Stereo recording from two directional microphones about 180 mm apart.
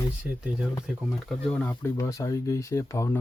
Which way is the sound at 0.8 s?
Centre (ahead or behind).